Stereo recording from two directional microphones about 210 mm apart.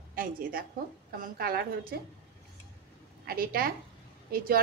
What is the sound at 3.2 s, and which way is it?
Speech, 45° right (ahead or behind).